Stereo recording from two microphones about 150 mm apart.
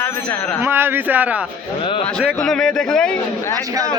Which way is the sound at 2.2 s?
Centre (ahead or behind).